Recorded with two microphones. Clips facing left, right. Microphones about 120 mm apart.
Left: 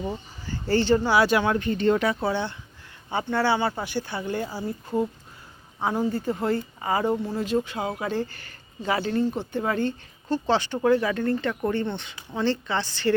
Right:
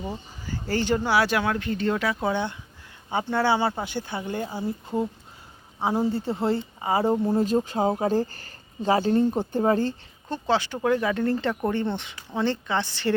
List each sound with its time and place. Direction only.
0.0 s speech: 10° right (ahead or behind)
2.2 s speech: 15° right (ahead or behind)
6.1 s speech: 25° right (ahead or behind)
7.3 s speech: 40° right (ahead or behind)
10.2 s speech: 10° right (ahead or behind)
10.8 s speech: 5° left (ahead or behind)
11.0 s speech: 20° right (ahead or behind)